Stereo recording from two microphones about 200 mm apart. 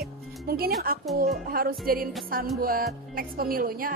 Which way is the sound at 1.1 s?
45° right (ahead or behind).